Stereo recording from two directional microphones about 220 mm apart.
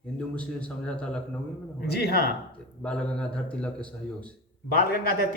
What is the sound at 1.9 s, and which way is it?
Speech, 45° left (ahead or behind).